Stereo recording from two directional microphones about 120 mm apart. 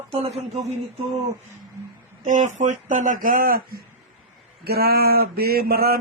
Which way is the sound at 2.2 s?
90° right.